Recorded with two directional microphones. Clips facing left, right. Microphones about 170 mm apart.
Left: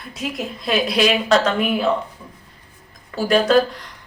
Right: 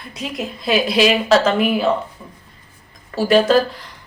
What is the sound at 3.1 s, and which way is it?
Speech, centre (ahead or behind).